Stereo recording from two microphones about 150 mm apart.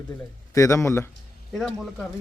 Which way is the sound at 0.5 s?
20° left (ahead or behind).